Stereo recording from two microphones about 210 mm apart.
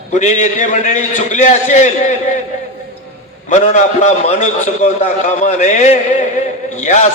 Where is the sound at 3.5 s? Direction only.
35° left (ahead or behind).